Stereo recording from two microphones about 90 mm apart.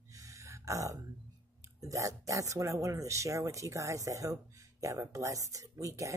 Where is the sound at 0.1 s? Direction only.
35° right (ahead or behind).